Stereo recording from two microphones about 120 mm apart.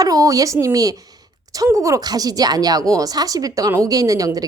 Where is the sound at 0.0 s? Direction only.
30° right (ahead or behind).